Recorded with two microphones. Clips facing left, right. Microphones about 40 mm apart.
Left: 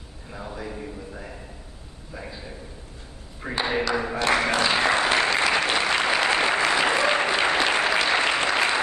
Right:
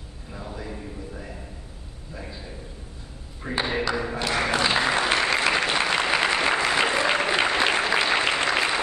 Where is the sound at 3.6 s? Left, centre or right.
Centre.